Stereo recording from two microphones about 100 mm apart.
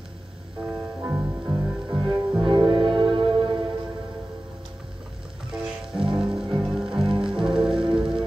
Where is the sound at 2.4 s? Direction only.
55° right (ahead or behind).